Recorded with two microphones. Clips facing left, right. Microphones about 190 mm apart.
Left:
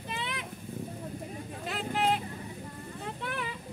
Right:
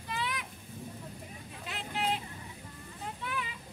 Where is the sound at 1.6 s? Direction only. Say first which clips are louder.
Left 5 dB; 45° left (ahead or behind).